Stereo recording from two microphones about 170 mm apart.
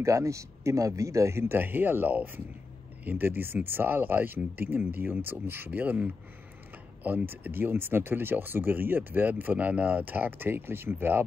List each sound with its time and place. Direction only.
0.0 s speech: 20° right (ahead or behind)